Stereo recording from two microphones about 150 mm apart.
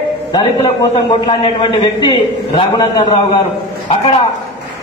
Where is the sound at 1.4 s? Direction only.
35° left (ahead or behind).